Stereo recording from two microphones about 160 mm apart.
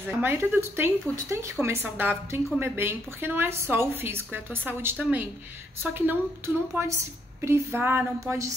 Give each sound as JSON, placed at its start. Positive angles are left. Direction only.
{"t": 0.2, "sound": "a woman's voice", "side_deg": -15}